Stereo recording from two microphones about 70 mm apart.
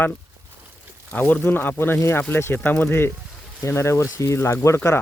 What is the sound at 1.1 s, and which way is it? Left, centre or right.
Speech, left.